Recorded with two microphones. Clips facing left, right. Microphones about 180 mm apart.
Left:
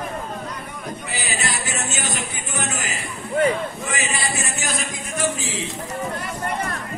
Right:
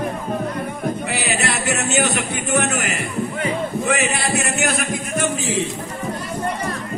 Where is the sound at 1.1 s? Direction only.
65° right (ahead or behind).